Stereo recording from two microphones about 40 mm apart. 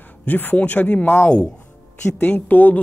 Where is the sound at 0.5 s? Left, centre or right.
Left.